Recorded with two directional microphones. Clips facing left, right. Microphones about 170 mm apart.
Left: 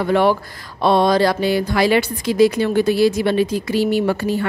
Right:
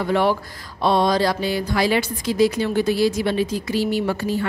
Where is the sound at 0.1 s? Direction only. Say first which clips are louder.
Left 4 dB; 60° left (ahead or behind).